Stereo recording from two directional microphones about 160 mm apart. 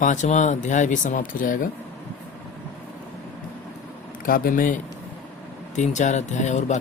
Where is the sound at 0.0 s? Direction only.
50° left (ahead or behind).